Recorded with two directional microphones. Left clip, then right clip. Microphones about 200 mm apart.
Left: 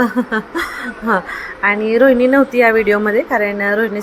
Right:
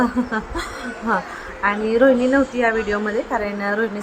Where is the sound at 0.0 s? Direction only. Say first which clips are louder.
Left 4 dB; 15° left (ahead or behind).